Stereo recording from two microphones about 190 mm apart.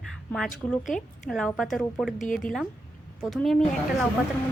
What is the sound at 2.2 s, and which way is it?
Speech, 45° left (ahead or behind).